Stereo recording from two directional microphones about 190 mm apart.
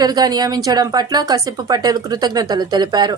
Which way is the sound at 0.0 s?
20° right (ahead or behind).